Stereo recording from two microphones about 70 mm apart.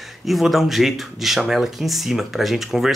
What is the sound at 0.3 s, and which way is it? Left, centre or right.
Speech, centre.